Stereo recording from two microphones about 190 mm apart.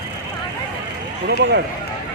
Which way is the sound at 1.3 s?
70° right (ahead or behind).